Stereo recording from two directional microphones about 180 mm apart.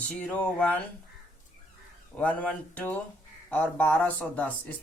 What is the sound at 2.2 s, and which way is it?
Speech, 10° left (ahead or behind).